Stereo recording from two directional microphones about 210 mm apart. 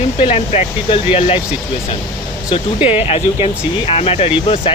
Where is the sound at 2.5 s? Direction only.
25° left (ahead or behind).